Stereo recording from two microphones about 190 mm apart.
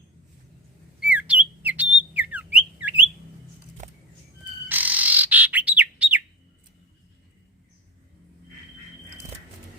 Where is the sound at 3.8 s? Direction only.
40° right (ahead or behind).